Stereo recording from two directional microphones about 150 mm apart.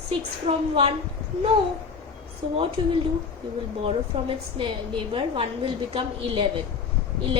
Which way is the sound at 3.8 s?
35° right (ahead or behind).